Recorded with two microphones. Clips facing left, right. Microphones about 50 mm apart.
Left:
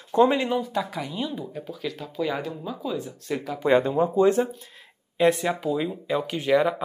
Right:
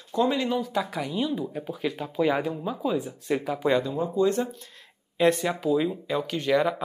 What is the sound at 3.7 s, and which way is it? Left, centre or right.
Speech, left.